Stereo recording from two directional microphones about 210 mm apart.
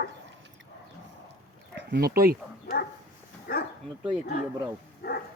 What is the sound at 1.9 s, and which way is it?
Speech, 45° right (ahead or behind).